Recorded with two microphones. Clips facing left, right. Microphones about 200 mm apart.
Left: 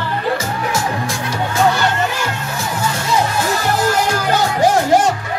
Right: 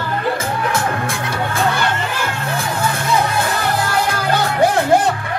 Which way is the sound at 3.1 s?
55° right (ahead or behind).